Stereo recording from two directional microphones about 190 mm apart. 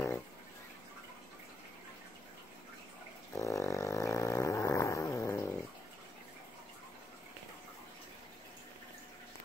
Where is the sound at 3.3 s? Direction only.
15° left (ahead or behind).